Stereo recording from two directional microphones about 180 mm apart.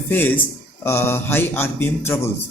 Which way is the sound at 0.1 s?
10° left (ahead or behind).